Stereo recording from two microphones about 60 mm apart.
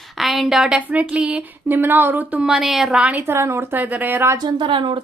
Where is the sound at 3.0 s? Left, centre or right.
Right.